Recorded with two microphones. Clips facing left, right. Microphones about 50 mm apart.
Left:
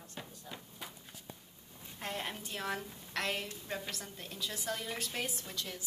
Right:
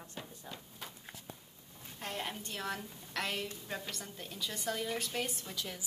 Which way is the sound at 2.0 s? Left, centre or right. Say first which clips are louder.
Even; centre.